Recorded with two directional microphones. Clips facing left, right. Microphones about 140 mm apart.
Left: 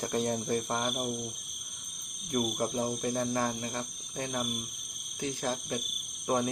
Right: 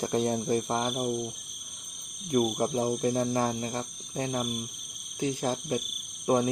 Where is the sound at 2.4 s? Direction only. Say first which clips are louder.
Right 2 dB; 30° right (ahead or behind).